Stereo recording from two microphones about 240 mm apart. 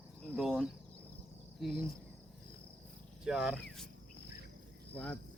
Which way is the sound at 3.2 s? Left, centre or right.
Centre.